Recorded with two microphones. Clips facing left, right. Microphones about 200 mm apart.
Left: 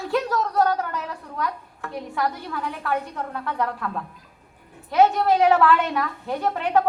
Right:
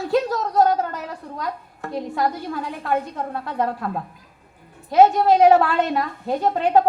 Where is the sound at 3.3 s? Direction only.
40° right (ahead or behind).